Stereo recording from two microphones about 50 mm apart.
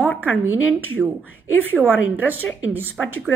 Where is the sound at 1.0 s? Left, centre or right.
Centre.